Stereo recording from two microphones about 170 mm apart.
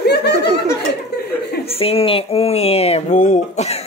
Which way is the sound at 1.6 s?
35° left (ahead or behind).